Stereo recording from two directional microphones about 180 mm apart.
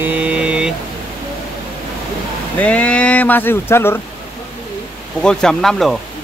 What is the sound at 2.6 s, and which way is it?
Speech, 5° left (ahead or behind).